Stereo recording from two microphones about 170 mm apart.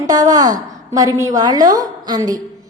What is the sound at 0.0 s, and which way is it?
A woman's voice, 20° right (ahead or behind).